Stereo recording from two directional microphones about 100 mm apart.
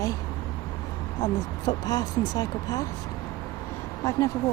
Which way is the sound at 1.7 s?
40° left (ahead or behind).